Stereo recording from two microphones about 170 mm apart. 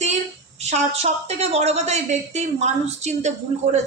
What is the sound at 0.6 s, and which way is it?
A woman's voice, 40° right (ahead or behind).